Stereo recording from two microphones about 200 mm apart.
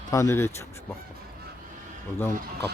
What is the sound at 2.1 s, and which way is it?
Speech, 10° left (ahead or behind).